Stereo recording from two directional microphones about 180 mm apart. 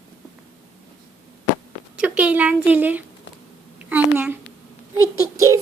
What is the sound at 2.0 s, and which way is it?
A woman's voice, 5° right (ahead or behind).